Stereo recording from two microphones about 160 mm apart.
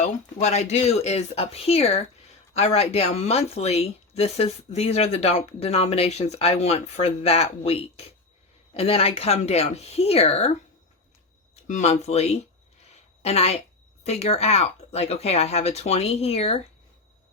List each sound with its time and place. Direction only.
0.0 s speech: 45° left (ahead or behind)
12.9 s a sound: 40° left (ahead or behind)
14.0 s speech: 40° left (ahead or behind)